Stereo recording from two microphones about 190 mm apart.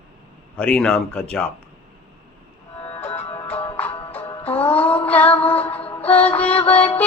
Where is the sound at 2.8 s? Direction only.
35° left (ahead or behind).